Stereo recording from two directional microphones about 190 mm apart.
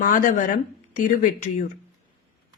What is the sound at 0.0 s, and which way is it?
A woman's voice, 45° left (ahead or behind).